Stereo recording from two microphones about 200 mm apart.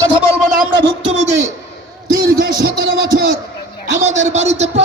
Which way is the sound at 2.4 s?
55° right (ahead or behind).